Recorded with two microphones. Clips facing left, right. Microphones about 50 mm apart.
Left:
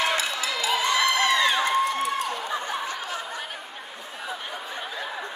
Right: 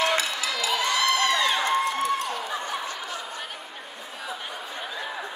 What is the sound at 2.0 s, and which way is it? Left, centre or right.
Run, centre.